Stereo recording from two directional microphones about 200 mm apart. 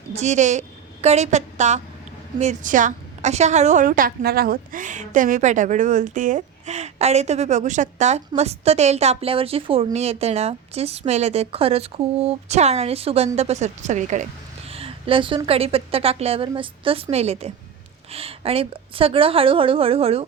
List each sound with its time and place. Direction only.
0.1 s a woman's voice: 35° right (ahead or behind)